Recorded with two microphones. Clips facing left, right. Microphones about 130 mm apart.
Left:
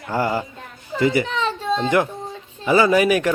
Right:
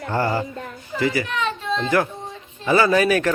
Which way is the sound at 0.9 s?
20° left (ahead or behind).